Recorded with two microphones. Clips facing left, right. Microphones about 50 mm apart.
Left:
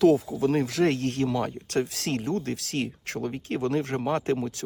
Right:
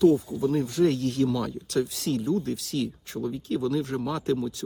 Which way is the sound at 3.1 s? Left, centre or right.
Left.